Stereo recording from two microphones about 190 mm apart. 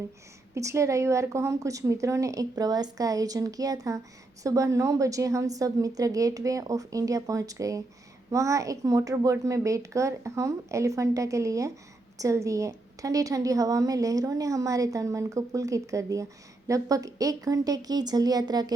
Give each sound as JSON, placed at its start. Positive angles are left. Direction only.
{"t": 0.5, "sound": "a woman's voice", "side_deg": -15}